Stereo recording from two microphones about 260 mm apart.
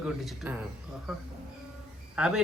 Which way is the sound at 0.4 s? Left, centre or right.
Centre.